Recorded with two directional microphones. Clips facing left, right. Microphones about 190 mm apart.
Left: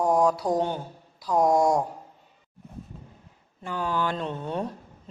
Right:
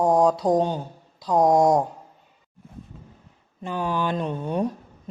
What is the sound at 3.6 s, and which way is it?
Speech, 20° right (ahead or behind).